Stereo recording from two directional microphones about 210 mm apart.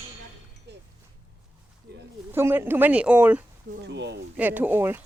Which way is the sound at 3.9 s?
55° right (ahead or behind).